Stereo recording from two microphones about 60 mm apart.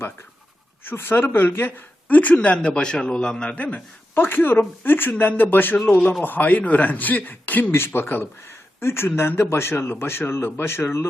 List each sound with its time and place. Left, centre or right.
0.9 s a woman's voice: left